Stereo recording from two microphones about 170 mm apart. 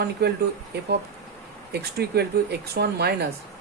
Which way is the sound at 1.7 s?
70° right (ahead or behind).